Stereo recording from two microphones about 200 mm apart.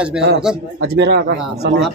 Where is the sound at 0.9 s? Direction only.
60° right (ahead or behind).